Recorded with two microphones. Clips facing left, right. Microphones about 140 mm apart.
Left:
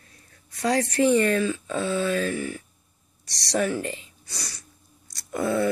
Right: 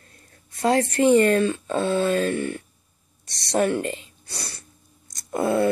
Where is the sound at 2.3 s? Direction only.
60° right (ahead or behind).